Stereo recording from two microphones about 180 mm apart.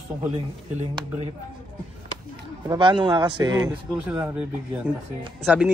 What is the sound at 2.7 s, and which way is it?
A man's voice, 25° right (ahead or behind).